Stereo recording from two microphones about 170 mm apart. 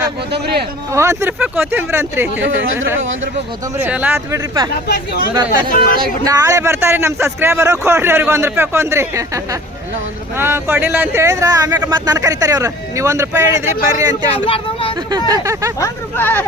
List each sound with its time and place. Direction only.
0.3 s speech: 75° right (ahead or behind)
0.9 s a man's voice: 15° right (ahead or behind)
4.9 s speech: 60° left (ahead or behind)
6.2 s a man's voice: 20° right (ahead or behind)
14.3 s speech: 35° left (ahead or behind)
15.3 s a man's voice: 20° right (ahead or behind)
15.8 s speech: 10° left (ahead or behind)